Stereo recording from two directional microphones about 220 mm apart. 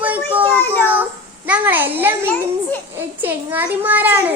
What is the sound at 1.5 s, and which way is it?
A child's voice, 10° right (ahead or behind).